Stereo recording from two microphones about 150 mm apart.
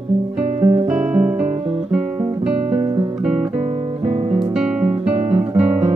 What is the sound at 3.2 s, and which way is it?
Guitar, 5° right (ahead or behind).